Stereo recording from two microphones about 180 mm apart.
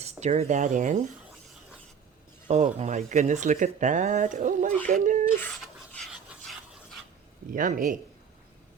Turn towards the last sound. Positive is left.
turn(degrees=-50)  # may be behind; listen again after turning